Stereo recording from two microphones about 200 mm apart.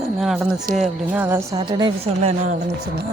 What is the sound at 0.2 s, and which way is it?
A woman's voice, centre (ahead or behind).